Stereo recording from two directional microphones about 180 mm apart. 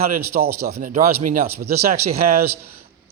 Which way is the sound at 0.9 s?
40° right (ahead or behind).